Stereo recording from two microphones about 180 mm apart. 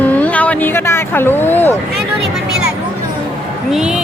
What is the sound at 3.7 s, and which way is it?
Speech, 5° right (ahead or behind).